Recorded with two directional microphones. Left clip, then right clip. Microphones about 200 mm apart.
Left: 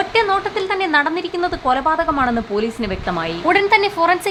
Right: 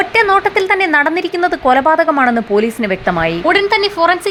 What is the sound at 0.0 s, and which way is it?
A woman's voice, 20° right (ahead or behind).